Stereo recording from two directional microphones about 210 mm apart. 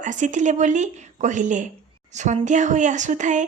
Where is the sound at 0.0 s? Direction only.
35° right (ahead or behind).